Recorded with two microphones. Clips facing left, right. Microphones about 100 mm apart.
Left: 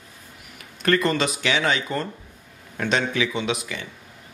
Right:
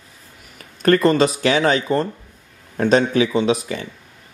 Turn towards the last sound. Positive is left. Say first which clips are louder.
# right 8 dB
turn(degrees=-35)  # may be behind; listen again after turning